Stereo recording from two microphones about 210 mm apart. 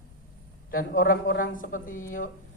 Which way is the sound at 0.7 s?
45° left (ahead or behind).